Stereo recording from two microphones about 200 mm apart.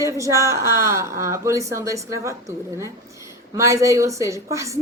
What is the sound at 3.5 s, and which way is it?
A woman's voice, 15° right (ahead or behind).